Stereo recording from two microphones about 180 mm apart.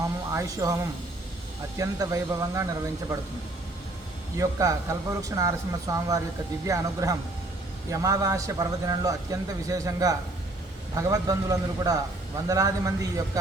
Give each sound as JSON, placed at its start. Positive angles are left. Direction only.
{"t": 0.0, "sound": "a sound", "side_deg": -20}
{"t": 1.8, "sound": "a man's voice", "side_deg": -15}
{"t": 4.4, "sound": "a man's voice", "side_deg": -20}